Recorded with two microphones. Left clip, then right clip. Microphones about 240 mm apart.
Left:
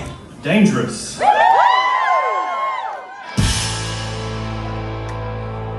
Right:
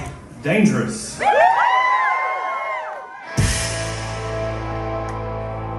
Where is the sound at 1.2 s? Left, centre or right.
Left.